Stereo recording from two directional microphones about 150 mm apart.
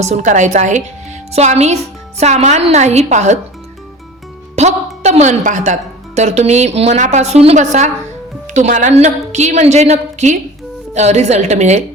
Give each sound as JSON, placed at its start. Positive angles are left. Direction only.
{"t": 0.0, "sound": "a woman's voice", "side_deg": -50}
{"t": 4.6, "sound": "a woman's voice", "side_deg": -45}